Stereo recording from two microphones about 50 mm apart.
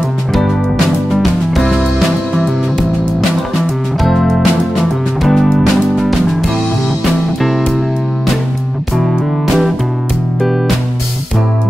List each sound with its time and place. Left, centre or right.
0.3 s music: centre
4.0 s music: centre